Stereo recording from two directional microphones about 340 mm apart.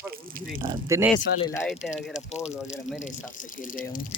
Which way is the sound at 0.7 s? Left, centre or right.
Centre.